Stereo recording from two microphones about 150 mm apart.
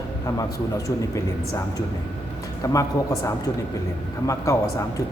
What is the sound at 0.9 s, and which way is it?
Speech, 20° left (ahead or behind).